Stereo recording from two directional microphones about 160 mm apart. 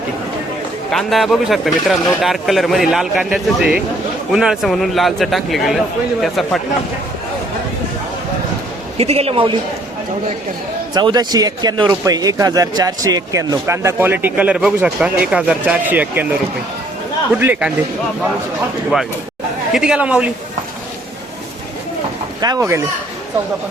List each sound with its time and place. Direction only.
0.9 s speech: centre (ahead or behind)
9.0 s a man's voice: 40° right (ahead or behind)
10.9 s speech: 25° right (ahead or behind)
17.4 s speech: 10° right (ahead or behind)
19.7 s speech: 5° right (ahead or behind)
22.4 s speech: 25° right (ahead or behind)